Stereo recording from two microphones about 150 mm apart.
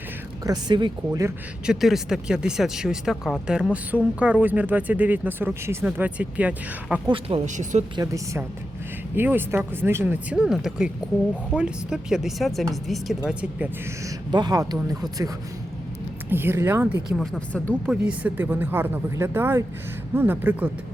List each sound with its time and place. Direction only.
0.4 s speech: 30° right (ahead or behind)
1.6 s speech: 5° right (ahead or behind)
7.1 s speech: 40° right (ahead or behind)
7.4 s speech: 55° right (ahead or behind)
7.9 s speech: 20° right (ahead or behind); by 13.7 s 5° right (ahead or behind)
14.3 s speech: 30° right (ahead or behind)
16.3 s speech: 15° right (ahead or behind)
17.2 s speech: 5° left (ahead or behind)
18.0 s speech: 10° right (ahead or behind)